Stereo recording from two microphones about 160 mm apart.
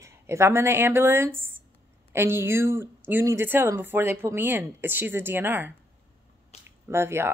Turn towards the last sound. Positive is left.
turn(degrees=-15)  # may be behind; listen again after turning